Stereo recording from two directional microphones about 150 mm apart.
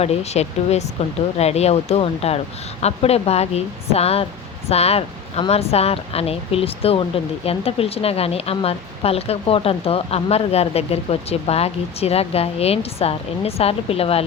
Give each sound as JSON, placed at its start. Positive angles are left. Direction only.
{"t": 0.0, "sound": "a woman's voice", "side_deg": 45}